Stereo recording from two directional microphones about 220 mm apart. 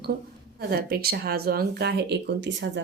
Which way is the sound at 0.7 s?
45° right (ahead or behind).